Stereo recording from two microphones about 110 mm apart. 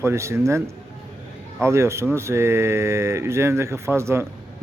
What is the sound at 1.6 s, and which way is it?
A man's voice, 25° right (ahead or behind).